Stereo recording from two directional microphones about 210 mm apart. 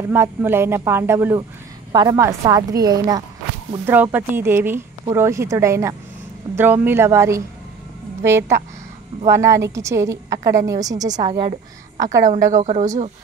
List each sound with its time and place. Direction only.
0.1 s a woman's voice: 10° right (ahead or behind)
12.6 s speech: 35° right (ahead or behind)